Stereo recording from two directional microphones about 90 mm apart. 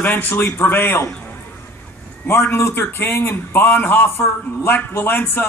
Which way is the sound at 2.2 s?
25° left (ahead or behind).